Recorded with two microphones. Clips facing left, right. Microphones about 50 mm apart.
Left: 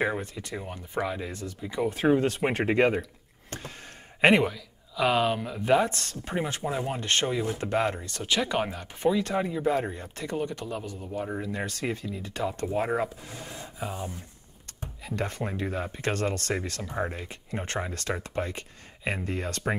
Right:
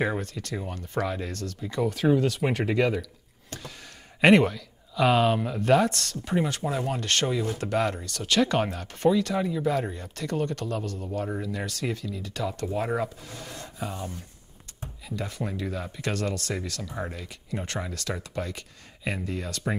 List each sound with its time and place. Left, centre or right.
0.0 s speech: centre
2.0 s speech: left
4.3 s speech: centre
5.6 s speech: centre
8.4 s speech: centre
9.2 s speech: left
10.3 s speech: centre
11.4 s speech: left
13.6 s a sound: centre
13.9 s speech: left